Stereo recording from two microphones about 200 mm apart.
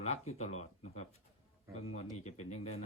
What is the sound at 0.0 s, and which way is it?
Speech, 30° left (ahead or behind).